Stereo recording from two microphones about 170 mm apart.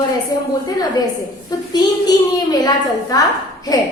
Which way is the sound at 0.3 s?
25° left (ahead or behind).